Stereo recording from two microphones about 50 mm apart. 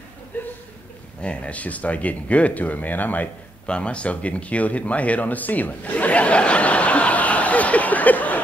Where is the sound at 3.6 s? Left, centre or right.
Left.